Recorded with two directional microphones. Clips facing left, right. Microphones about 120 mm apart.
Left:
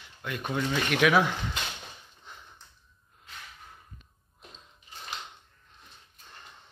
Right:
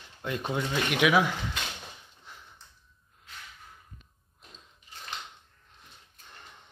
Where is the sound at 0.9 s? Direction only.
5° right (ahead or behind).